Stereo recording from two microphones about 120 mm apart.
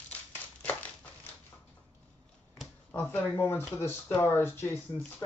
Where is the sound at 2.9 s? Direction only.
15° left (ahead or behind).